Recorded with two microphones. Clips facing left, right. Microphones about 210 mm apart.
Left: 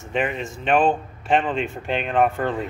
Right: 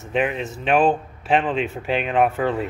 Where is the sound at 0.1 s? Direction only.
Centre (ahead or behind).